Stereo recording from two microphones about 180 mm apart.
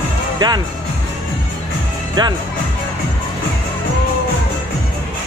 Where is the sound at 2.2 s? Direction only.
25° right (ahead or behind).